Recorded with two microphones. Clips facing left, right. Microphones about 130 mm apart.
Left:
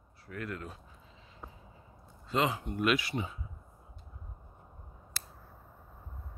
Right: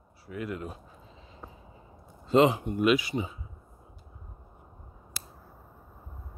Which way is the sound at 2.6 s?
5° right (ahead or behind).